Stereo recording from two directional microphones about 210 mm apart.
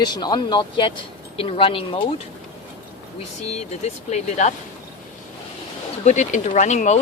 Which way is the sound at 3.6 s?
30° left (ahead or behind).